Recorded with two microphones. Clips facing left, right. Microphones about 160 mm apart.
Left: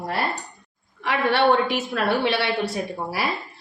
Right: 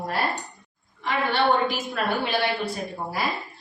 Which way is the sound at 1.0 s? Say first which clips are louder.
Left 3 dB; 75° left (ahead or behind).